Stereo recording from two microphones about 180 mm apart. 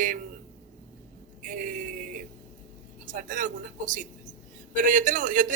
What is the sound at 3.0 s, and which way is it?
A man's voice, 45° right (ahead or behind).